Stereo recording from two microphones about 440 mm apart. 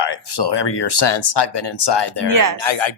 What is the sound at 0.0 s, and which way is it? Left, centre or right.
Speech, left.